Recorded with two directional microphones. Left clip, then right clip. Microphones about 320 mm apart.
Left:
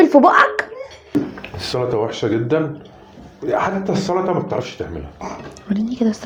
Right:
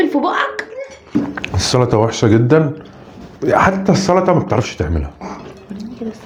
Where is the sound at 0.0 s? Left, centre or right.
Centre.